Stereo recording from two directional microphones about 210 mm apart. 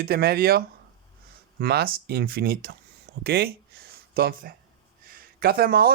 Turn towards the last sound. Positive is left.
turn(degrees=-45)  # may be behind; listen again after turning